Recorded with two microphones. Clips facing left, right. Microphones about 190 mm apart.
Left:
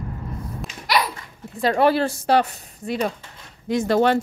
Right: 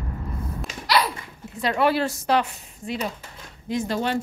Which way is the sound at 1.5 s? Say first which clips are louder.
Left 4 dB; 40° left (ahead or behind).